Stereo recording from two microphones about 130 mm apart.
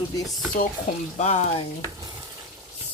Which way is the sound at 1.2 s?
60° left (ahead or behind).